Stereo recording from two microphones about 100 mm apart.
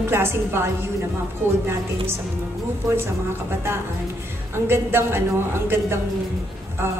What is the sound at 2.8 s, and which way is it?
A woman's voice, 25° right (ahead or behind).